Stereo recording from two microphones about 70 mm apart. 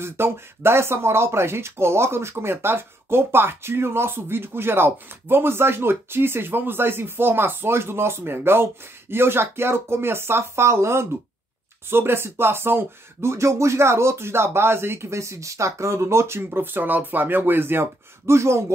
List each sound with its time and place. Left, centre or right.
0.0 s speech: right
16.4 s speech: right